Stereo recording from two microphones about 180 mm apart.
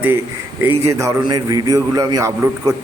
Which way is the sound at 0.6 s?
15° right (ahead or behind).